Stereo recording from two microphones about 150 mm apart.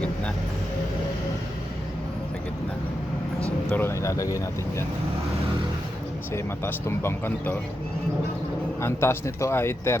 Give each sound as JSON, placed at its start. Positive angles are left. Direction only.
{"t": 3.7, "sound": "speech", "side_deg": 15}
{"t": 6.3, "sound": "speech", "side_deg": 15}
{"t": 8.8, "sound": "speech", "side_deg": 15}